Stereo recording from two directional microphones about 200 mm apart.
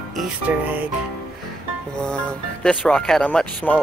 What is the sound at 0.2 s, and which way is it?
Speech, 10° right (ahead or behind).